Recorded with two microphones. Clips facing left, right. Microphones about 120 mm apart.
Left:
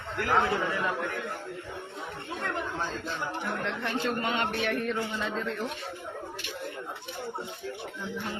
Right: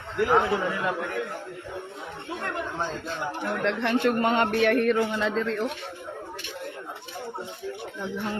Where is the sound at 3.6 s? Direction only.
80° right; by 4.8 s 50° right (ahead or behind).